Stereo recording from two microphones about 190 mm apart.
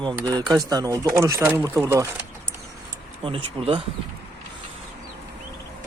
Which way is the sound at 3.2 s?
30° right (ahead or behind).